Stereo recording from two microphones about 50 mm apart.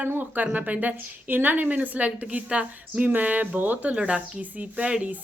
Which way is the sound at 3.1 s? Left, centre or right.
Right.